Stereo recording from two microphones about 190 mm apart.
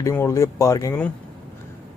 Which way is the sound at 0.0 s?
15° left (ahead or behind).